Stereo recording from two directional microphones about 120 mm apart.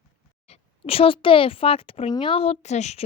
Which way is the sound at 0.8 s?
50° left (ahead or behind).